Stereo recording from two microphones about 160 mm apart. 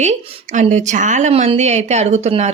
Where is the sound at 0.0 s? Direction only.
45° right (ahead or behind).